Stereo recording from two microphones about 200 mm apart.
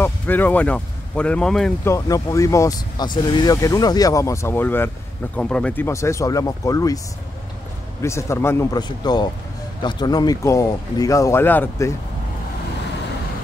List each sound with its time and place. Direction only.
0.0 s speech: 10° left (ahead or behind)
1.9 s speech: 15° left (ahead or behind)
8.0 s speech: 15° left (ahead or behind)